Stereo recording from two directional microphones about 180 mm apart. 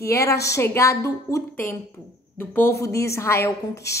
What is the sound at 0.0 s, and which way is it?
A woman's voice, 15° left (ahead or behind).